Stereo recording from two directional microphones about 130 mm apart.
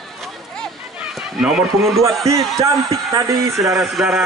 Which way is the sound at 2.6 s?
25° right (ahead or behind).